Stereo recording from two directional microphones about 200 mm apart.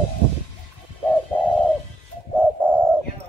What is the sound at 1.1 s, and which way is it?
Bird, 5° left (ahead or behind).